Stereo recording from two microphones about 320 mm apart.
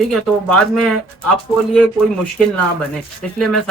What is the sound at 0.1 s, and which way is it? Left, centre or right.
Speech, centre.